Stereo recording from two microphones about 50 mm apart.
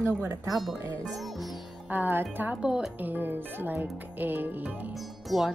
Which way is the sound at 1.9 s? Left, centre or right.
Right.